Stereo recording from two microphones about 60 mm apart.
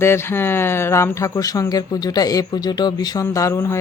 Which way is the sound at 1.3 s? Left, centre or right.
Left.